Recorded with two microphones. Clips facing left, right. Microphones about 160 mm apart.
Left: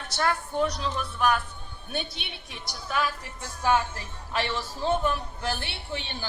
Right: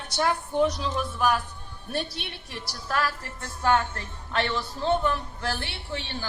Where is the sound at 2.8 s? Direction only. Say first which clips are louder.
Right 1 dB; centre (ahead or behind).